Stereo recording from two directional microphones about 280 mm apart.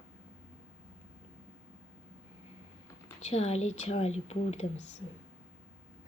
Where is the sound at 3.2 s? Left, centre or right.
Left.